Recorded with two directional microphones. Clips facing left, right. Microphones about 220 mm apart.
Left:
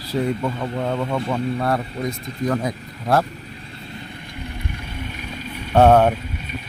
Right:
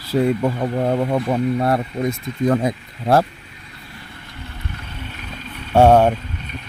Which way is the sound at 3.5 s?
30° left (ahead or behind).